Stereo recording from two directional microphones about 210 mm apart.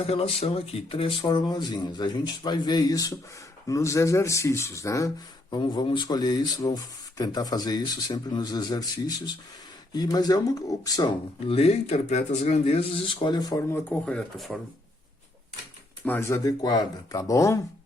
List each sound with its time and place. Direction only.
0.0 s speech: 30° left (ahead or behind)
14.0 s speech: 5° left (ahead or behind)
16.0 s speech: 10° left (ahead or behind)